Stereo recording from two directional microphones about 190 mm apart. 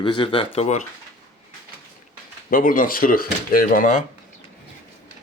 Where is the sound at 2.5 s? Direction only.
45° left (ahead or behind).